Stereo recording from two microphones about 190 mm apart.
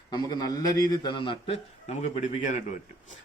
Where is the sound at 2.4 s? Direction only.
40° left (ahead or behind).